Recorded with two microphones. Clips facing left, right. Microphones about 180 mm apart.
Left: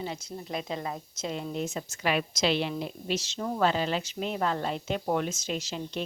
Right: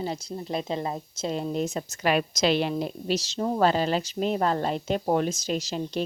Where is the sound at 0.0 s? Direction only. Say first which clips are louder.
Right 5 dB; 35° right (ahead or behind).